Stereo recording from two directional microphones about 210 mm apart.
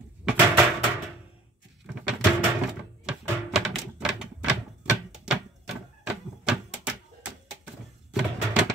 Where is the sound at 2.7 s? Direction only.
5° right (ahead or behind).